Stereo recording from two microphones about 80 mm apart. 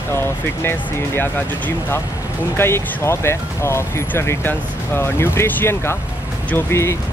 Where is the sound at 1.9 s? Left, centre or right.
Left.